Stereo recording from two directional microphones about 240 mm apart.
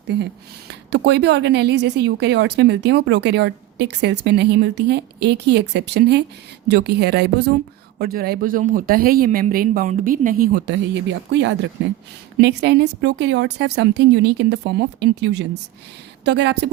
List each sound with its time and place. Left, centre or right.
0.1 s speech: right